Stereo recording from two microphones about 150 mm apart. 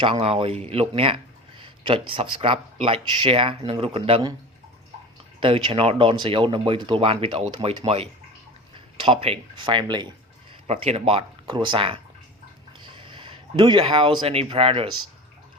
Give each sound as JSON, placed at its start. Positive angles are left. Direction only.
{"t": 0.0, "sound": "speech", "side_deg": -40}
{"t": 5.4, "sound": "speech", "side_deg": -35}
{"t": 10.7, "sound": "speech", "side_deg": -45}